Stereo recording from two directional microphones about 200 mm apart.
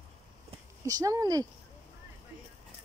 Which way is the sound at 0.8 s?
15° right (ahead or behind).